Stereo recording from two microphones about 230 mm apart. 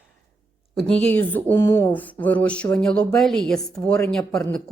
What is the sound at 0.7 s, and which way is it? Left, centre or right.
Speech, centre.